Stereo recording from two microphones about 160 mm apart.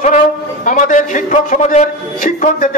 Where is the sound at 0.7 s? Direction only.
55° left (ahead or behind).